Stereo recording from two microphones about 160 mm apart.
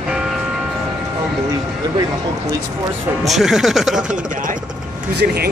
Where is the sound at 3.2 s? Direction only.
Centre (ahead or behind).